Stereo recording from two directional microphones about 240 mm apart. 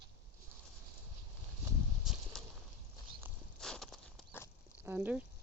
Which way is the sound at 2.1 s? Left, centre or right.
Centre.